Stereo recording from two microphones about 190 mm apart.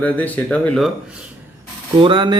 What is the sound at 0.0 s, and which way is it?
Speech, 10° left (ahead or behind).